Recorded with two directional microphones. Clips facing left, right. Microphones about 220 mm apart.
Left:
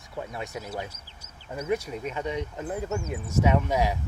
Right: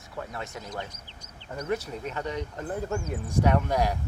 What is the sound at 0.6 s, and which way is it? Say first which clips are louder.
Speech: left 2 dB; 5° left (ahead or behind).